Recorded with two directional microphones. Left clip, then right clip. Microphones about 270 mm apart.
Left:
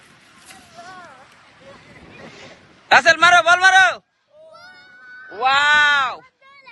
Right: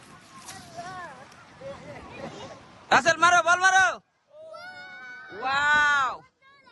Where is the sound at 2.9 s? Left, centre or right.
Centre.